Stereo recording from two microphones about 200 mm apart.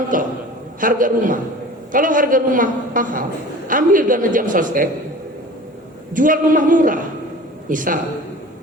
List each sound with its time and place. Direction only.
0.1 s a man's voice: 40° right (ahead or behind)
6.1 s a woman's voice: 40° right (ahead or behind)